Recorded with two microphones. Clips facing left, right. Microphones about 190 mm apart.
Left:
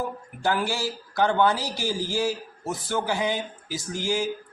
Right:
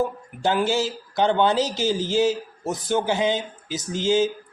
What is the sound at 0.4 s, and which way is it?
A man's voice, 20° right (ahead or behind).